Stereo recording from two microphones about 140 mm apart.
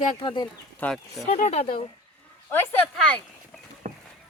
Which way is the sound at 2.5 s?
10° left (ahead or behind).